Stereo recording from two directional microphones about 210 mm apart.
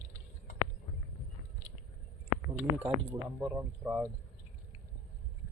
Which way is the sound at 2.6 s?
10° right (ahead or behind).